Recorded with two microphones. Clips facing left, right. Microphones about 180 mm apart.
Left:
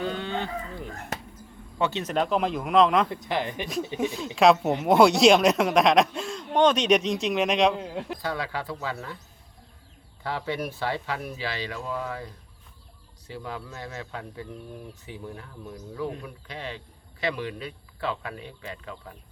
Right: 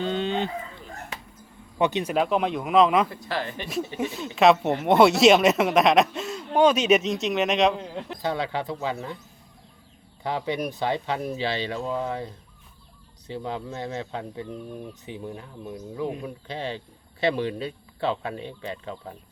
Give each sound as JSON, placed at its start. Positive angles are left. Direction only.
{"t": 0.0, "sound": "chicken", "side_deg": -20}
{"t": 1.8, "sound": "speech", "side_deg": -15}
{"t": 3.1, "sound": "speech", "side_deg": 20}
{"t": 4.0, "sound": "speech", "side_deg": -5}
{"t": 8.2, "sound": "speech", "side_deg": -20}
{"t": 10.2, "sound": "speech", "side_deg": -20}